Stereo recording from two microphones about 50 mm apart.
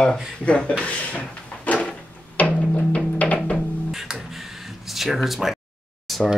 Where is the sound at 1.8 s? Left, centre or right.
Left.